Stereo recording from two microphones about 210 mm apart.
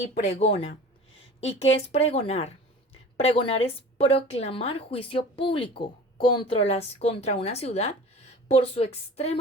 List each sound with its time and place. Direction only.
0.0 s a woman's voice: 30° left (ahead or behind)
1.9 s a woman's voice: 30° left (ahead or behind)